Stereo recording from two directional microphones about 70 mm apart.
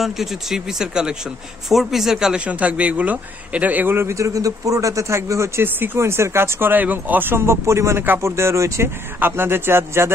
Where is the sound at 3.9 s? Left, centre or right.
Right.